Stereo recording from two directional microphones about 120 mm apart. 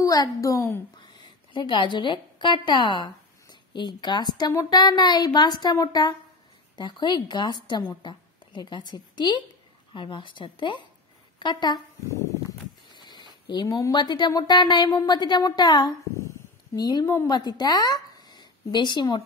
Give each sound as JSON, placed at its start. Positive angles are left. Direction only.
{"t": 0.0, "sound": "a child's voice", "side_deg": 30}
{"t": 0.9, "sound": "a woman's voice", "side_deg": 40}
{"t": 12.9, "sound": "a sound", "side_deg": 40}
{"t": 13.5, "sound": "a woman's voice", "side_deg": 35}
{"t": 17.0, "sound": "a child's voice", "side_deg": 25}
{"t": 17.3, "sound": "speech", "side_deg": 35}